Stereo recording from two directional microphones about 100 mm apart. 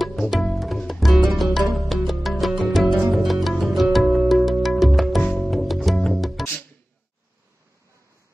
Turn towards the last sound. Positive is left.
turn(degrees=0)  # may be behind; listen again after turning